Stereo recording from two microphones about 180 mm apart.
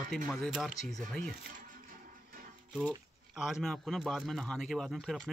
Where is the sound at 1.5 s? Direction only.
50° right (ahead or behind).